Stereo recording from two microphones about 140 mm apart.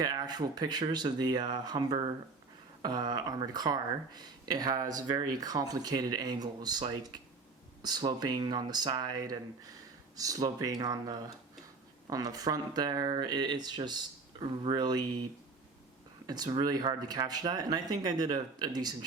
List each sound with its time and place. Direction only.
0.0 s speech: 30° right (ahead or behind)